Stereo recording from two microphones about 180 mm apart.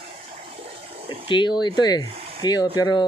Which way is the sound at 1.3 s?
25° left (ahead or behind).